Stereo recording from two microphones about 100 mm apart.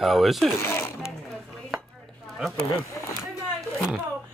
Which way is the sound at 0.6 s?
25° left (ahead or behind).